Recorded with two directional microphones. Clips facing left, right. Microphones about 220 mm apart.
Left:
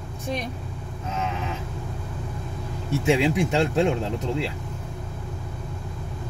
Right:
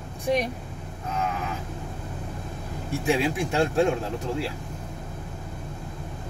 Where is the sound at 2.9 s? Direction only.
20° left (ahead or behind).